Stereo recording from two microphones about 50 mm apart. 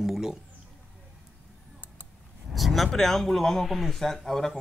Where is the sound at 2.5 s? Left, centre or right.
Centre.